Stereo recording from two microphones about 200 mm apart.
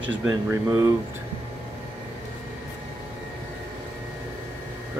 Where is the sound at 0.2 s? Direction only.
10° right (ahead or behind).